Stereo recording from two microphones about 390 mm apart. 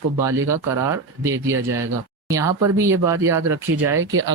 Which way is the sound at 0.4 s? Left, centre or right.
Centre.